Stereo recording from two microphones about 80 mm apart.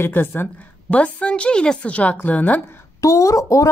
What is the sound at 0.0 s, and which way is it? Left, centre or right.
A woman's voice, left.